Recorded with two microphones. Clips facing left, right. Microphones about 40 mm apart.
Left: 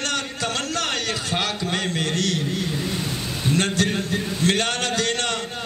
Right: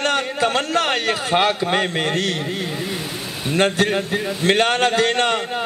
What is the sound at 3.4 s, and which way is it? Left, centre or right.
A man's voice, right.